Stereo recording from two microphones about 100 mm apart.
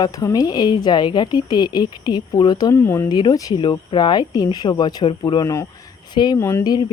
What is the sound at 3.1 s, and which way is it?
A woman's voice, 45° left (ahead or behind).